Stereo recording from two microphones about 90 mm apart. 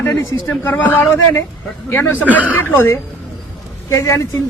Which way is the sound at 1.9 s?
25° left (ahead or behind).